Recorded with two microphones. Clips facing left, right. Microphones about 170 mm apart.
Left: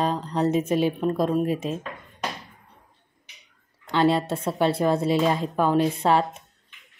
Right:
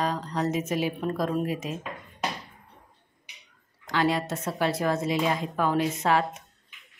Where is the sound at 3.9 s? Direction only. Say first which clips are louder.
Left 4 dB; 30° left (ahead or behind).